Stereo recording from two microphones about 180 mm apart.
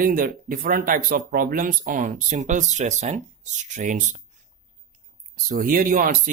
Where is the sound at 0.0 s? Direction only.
50° right (ahead or behind).